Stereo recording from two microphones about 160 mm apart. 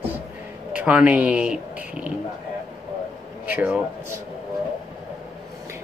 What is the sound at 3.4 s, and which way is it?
Speech, 10° right (ahead or behind).